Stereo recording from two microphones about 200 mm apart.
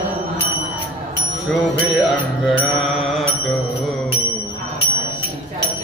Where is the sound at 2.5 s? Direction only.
5° right (ahead or behind).